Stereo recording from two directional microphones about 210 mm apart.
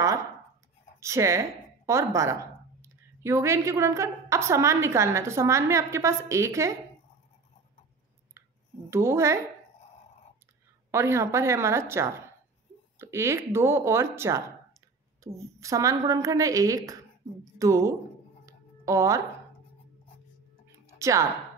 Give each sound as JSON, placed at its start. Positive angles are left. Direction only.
{"t": 1.0, "sound": "a woman's voice", "side_deg": -15}
{"t": 8.9, "sound": "a woman's voice", "side_deg": -15}
{"t": 10.9, "sound": "a woman's voice", "side_deg": -10}
{"t": 18.4, "sound": "music", "side_deg": -15}
{"t": 20.8, "sound": "a sound", "side_deg": -15}